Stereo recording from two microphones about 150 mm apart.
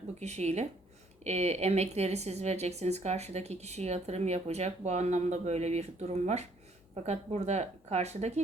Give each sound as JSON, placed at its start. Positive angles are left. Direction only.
{"t": 0.2, "sound": "speech", "side_deg": -45}